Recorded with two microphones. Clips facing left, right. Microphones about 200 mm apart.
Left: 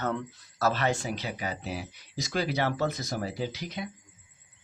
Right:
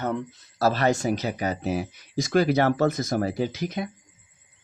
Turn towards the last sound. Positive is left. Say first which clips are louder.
# right 6 dB
turn(degrees=-50)  # may be behind; listen again after turning